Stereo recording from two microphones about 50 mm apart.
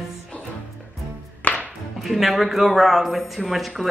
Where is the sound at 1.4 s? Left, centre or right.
Left.